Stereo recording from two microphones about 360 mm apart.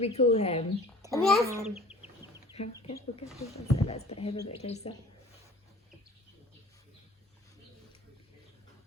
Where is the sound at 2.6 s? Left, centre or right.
Centre.